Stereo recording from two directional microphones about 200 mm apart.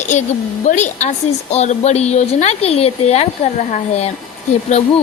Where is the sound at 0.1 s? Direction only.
35° left (ahead or behind).